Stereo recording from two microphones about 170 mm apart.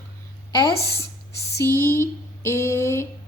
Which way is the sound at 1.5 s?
15° left (ahead or behind).